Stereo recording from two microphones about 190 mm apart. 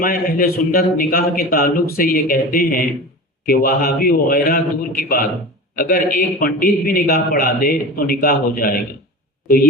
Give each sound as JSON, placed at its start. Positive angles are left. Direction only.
{"t": 0.0, "sound": "a man's voice", "side_deg": 50}